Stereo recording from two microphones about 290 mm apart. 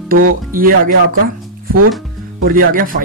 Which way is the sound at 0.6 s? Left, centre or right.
Right.